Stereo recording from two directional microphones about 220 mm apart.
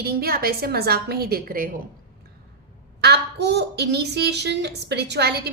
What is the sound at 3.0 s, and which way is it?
A woman's voice, 50° right (ahead or behind).